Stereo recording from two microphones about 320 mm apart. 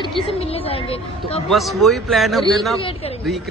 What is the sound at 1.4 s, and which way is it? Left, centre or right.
A man's voice, centre.